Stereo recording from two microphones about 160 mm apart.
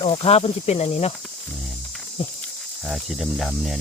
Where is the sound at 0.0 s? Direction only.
35° left (ahead or behind).